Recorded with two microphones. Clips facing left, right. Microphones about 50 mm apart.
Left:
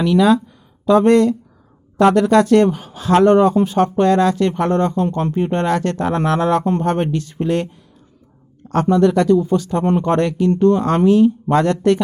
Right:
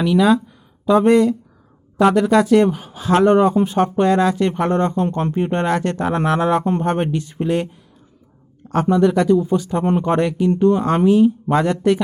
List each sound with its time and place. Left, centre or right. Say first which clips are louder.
0.0 s speech: left 1 dB; centre
8.7 s speech: left 1 dB; centre